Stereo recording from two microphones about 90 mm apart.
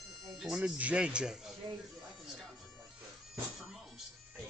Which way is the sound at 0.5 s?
15° right (ahead or behind).